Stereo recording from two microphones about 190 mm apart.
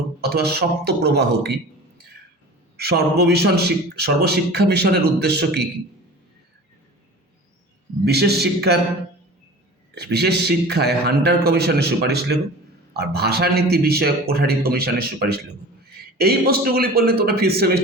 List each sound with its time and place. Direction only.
0.2 s a man's voice: 60° right (ahead or behind)
2.7 s a man's voice: 55° right (ahead or behind)
8.0 s a man's voice: 60° right (ahead or behind)
9.9 s a man's voice: 60° right (ahead or behind)